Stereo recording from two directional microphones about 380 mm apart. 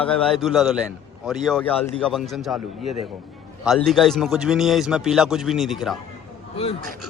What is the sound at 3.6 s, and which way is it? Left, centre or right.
A man's voice, centre.